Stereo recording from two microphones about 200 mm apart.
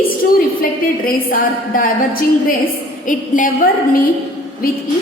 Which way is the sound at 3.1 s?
40° left (ahead or behind).